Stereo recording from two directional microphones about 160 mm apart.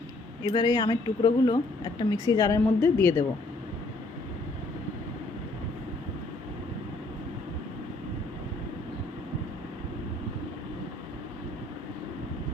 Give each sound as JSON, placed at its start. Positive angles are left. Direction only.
{"t": 0.4, "sound": "speech", "side_deg": 25}